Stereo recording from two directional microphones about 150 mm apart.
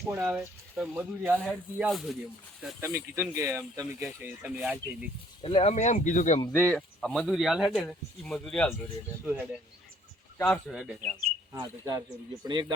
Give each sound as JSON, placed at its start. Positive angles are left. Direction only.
{"t": 0.1, "sound": "speech", "side_deg": -5}
{"t": 2.8, "sound": "speech", "side_deg": -20}
{"t": 5.4, "sound": "speech", "side_deg": 35}
{"t": 5.7, "sound": "speech", "side_deg": 55}
{"t": 6.4, "sound": "speech", "side_deg": 15}
{"t": 6.7, "sound": "speech", "side_deg": 0}
{"t": 9.2, "sound": "speech", "side_deg": -10}
{"t": 10.3, "sound": "speech", "side_deg": 15}
{"t": 10.7, "sound": "speech", "side_deg": 0}
{"t": 11.6, "sound": "speech", "side_deg": -20}